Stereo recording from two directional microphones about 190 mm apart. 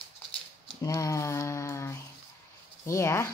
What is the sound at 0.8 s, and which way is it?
A woman's voice, 15° left (ahead or behind).